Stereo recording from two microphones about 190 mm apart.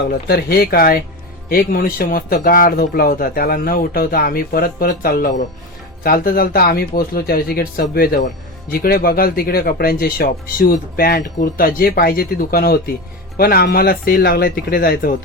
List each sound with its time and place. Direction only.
0.1 s speech: 55° left (ahead or behind)